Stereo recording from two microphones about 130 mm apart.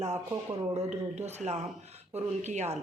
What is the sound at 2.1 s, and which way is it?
Speech, 60° right (ahead or behind).